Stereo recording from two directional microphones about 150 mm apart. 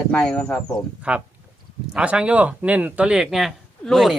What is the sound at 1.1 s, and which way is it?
Speech, 10° right (ahead or behind).